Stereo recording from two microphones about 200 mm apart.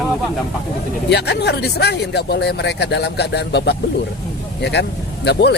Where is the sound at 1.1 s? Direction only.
55° left (ahead or behind).